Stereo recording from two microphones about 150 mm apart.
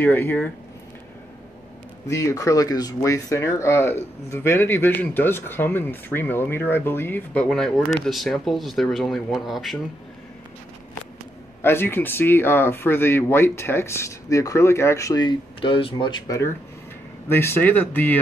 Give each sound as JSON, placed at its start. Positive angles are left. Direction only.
{"t": 0.0, "sound": "speech", "side_deg": 15}
{"t": 2.0, "sound": "speech", "side_deg": 20}
{"t": 11.6, "sound": "speech", "side_deg": 15}
{"t": 17.3, "sound": "speech", "side_deg": 15}